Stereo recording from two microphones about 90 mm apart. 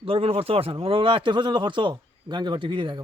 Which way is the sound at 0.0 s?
90° right.